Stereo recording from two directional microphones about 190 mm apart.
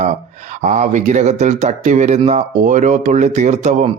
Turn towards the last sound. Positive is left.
turn(degrees=-40)  # may be behind; listen again after turning